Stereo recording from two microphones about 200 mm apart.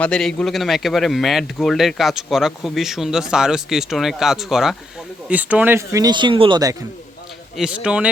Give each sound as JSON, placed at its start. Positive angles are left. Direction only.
{"t": 0.0, "sound": "a man's voice", "side_deg": 5}
{"t": 7.5, "sound": "a man's voice", "side_deg": -5}